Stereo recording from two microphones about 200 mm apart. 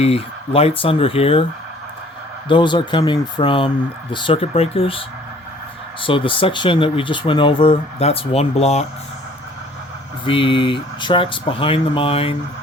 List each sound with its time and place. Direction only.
0.0 s speech: 30° left (ahead or behind)
2.5 s speech: 25° left (ahead or behind)
10.2 s speech: 25° left (ahead or behind)